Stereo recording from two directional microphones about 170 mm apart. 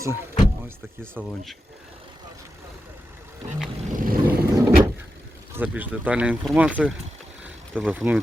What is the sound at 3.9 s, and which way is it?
Vehicle, 55° right (ahead or behind).